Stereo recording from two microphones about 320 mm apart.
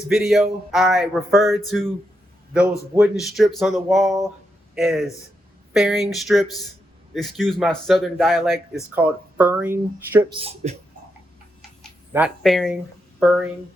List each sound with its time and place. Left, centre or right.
0.1 s speech: centre
10.4 s speech: centre
11.8 s speech: centre